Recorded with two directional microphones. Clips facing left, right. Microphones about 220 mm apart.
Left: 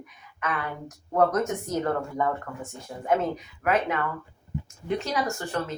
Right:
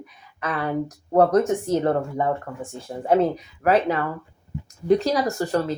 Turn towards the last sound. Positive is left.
turn(degrees=-35)  # may be behind; listen again after turning